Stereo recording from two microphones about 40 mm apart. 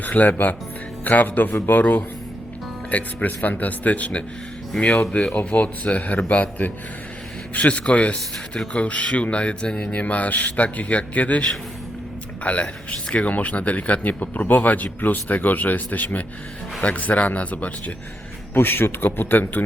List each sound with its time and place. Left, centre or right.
0.0 s speech: left
9.9 s a man's voice: left
18.5 s a man's voice: left